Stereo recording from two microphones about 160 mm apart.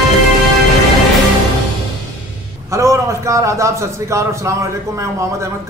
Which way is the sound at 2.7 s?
20° right (ahead or behind).